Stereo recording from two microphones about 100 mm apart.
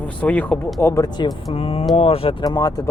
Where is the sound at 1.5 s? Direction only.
80° left.